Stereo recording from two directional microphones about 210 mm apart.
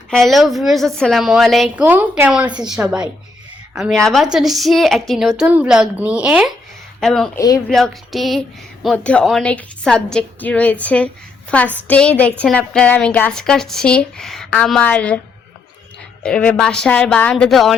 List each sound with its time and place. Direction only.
0.1 s a woman's voice: centre (ahead or behind)
7.3 s speech: 15° left (ahead or behind)
7.7 s a woman's voice: centre (ahead or behind)
16.2 s a woman's voice: 5° left (ahead or behind)